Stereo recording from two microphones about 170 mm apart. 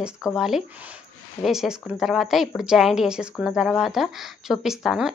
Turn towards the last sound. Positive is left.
turn(degrees=0)  # may be behind; listen again after turning